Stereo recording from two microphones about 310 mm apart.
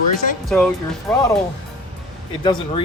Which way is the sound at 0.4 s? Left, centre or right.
Centre.